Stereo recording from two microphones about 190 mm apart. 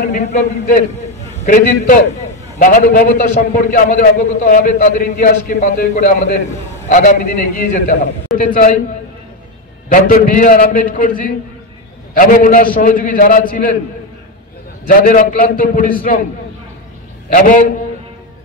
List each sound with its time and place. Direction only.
0.1 s a man's voice: 40° left (ahead or behind)
9.8 s a man's voice: 45° left (ahead or behind)
14.9 s a man's voice: 45° left (ahead or behind)
17.3 s a man's voice: 45° left (ahead or behind)